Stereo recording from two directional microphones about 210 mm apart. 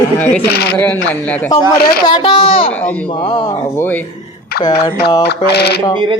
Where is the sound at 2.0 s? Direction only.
20° left (ahead or behind).